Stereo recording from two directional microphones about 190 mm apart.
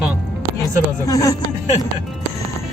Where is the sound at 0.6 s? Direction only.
15° left (ahead or behind).